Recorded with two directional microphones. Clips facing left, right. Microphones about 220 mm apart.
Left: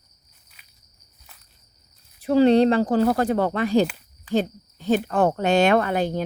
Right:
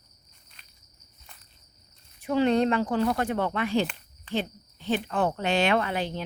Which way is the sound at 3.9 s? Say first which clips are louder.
Left 2 dB; 5° left (ahead or behind).